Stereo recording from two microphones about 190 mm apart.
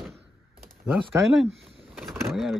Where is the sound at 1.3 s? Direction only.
Centre (ahead or behind).